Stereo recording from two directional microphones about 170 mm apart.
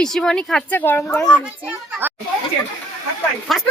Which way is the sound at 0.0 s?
5° left (ahead or behind).